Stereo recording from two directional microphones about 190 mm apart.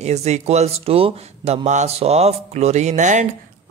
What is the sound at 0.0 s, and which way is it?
Speech, 35° right (ahead or behind).